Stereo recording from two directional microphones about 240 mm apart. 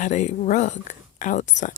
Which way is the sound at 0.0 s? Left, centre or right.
Left.